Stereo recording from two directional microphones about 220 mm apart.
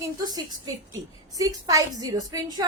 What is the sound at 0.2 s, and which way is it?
A woman's voice, 15° right (ahead or behind).